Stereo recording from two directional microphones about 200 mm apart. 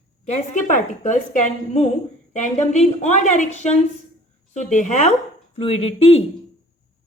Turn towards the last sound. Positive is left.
turn(degrees=30)  # may be behind; listen again after turning